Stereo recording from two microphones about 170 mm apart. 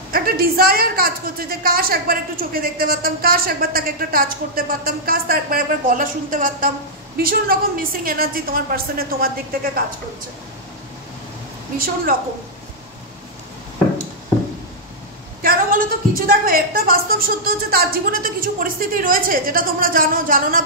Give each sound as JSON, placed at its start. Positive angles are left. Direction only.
{"t": 0.1, "sound": "a woman's voice", "side_deg": -60}
{"t": 11.8, "sound": "a woman's voice", "side_deg": -55}
{"t": 15.4, "sound": "a woman's voice", "side_deg": -55}